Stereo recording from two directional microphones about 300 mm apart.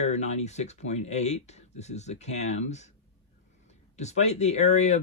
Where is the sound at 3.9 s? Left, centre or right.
Left.